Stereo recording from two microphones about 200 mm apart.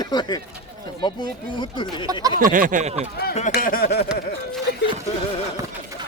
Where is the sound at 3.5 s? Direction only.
45° left (ahead or behind).